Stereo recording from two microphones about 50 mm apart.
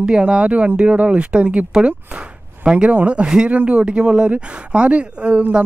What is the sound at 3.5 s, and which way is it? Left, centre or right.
Speech, right.